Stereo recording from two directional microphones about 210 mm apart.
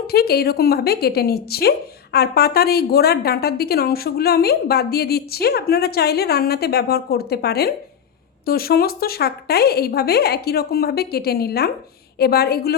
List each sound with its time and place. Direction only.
0.1 s a woman's voice: 50° left (ahead or behind)